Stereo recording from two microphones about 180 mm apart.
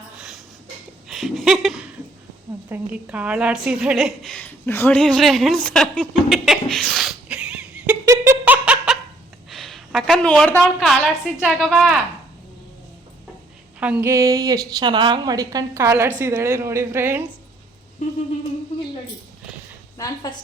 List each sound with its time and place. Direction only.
0.2 s a sound: centre (ahead or behind)
2.6 s a woman's voice: 10° right (ahead or behind)
13.7 s a woman's voice: 10° right (ahead or behind)